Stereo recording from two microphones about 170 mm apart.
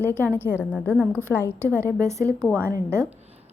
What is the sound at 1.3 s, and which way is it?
A woman's voice, 15° right (ahead or behind).